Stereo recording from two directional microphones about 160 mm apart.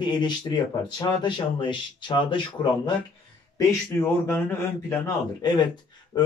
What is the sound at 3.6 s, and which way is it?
Speech, 15° left (ahead or behind).